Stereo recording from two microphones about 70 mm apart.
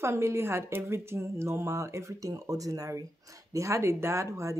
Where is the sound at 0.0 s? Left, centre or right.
Right.